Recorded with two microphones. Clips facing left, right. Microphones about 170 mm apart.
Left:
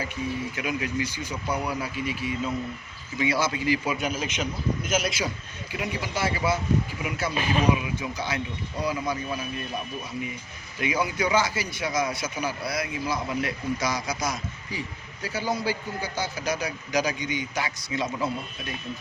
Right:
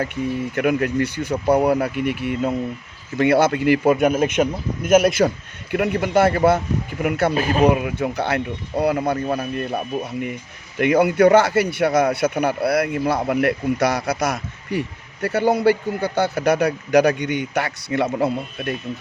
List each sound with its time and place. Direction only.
0.5 s speech: 60° right (ahead or behind)
7.3 s speech: 40° right (ahead or behind)
7.6 s speech: 60° right (ahead or behind)